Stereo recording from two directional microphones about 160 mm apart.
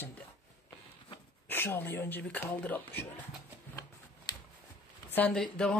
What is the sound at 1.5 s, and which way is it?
Speech, 15° left (ahead or behind).